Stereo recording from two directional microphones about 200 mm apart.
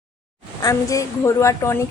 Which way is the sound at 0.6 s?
15° left (ahead or behind).